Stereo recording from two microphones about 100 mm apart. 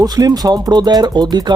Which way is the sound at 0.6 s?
45° right (ahead or behind).